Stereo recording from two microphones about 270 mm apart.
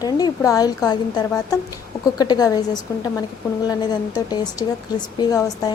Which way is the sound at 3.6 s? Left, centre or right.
Centre.